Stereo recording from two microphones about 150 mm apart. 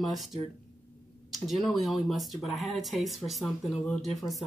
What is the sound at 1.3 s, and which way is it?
Speech, centre (ahead or behind).